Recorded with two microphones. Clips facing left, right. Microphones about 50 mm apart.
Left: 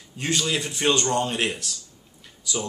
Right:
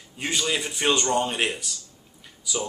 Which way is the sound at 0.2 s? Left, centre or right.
Centre.